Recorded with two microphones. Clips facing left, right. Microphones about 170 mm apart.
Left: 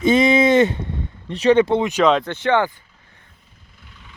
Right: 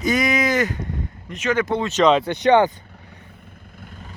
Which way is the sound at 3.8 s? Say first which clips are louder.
Right 8 dB; 50° right (ahead or behind).